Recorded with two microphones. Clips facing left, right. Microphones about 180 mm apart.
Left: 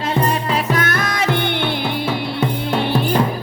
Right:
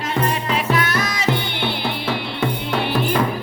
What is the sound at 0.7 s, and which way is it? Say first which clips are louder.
Music: left 1 dB; 50° left (ahead or behind).